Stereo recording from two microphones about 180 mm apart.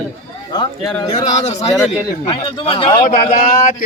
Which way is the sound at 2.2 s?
30° left (ahead or behind).